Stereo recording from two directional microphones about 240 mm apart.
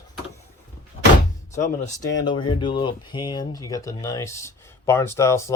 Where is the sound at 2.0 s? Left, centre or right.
Centre.